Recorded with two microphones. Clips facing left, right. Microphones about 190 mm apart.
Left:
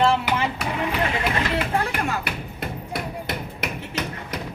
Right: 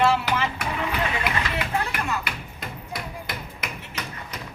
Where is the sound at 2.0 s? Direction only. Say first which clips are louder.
Left 2 dB; 45° left (ahead or behind).